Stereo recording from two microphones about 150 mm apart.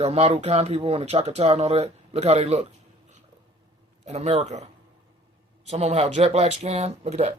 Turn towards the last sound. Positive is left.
turn(degrees=-45)  # may be behind; listen again after turning